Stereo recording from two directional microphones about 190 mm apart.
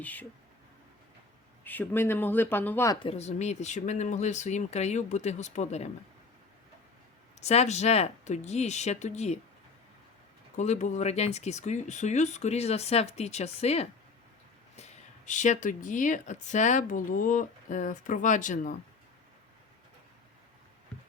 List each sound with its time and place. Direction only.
0.0 s speech: 10° left (ahead or behind)
1.6 s speech: 10° left (ahead or behind)
3.0 s speech: 35° left (ahead or behind)
7.4 s speech: 35° left (ahead or behind)
10.6 s speech: 40° left (ahead or behind)